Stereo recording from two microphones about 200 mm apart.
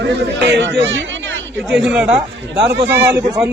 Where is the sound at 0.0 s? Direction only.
60° right (ahead or behind).